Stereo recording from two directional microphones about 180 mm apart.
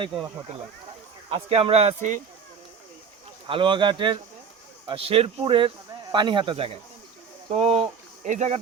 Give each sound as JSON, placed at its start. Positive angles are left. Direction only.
{"t": 1.3, "sound": "speech", "side_deg": -30}
{"t": 3.4, "sound": "speech", "side_deg": -25}